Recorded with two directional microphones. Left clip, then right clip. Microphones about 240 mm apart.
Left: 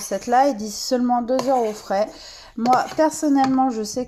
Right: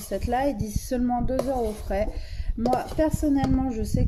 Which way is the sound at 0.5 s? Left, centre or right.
Left.